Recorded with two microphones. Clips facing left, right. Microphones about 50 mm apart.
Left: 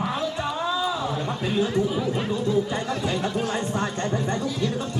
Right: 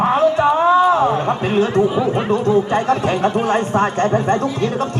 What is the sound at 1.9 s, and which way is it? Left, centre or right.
Speech, right.